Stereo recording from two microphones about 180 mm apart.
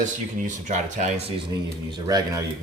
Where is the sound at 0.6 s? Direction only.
40° right (ahead or behind).